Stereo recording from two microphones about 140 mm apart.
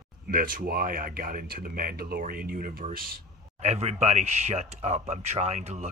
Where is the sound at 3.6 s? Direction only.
50° right (ahead or behind).